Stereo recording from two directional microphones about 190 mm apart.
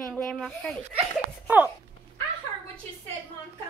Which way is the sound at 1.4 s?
10° right (ahead or behind).